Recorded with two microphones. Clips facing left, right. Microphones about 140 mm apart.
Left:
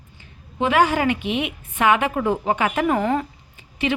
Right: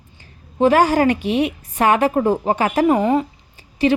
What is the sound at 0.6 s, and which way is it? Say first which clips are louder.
Speech: right 5 dB; 40° right (ahead or behind).